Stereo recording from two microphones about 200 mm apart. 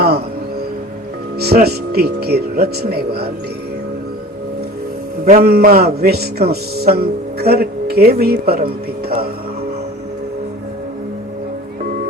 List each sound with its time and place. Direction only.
1.4 s speech: 50° right (ahead or behind)
5.4 s speech: 50° right (ahead or behind)